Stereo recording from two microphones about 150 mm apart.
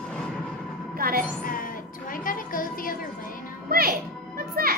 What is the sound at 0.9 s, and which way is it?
Speech, 75° right (ahead or behind).